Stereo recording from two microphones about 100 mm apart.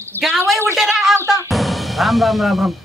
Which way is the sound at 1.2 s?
30° right (ahead or behind).